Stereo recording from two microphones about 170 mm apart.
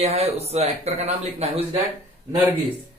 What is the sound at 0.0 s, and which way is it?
Speech, 35° right (ahead or behind).